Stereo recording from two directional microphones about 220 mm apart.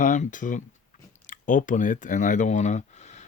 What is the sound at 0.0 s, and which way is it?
Speech, 35° left (ahead or behind).